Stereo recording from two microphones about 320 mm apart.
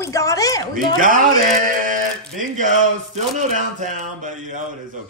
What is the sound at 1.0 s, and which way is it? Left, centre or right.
Speech, right.